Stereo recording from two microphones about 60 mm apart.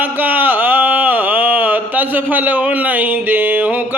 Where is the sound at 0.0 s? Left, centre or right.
Right.